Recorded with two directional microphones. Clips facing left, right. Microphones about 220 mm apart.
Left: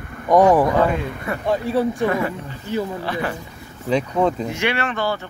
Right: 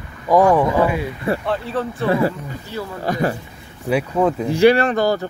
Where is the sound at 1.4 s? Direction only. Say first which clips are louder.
Left 3 dB; 15° left (ahead or behind).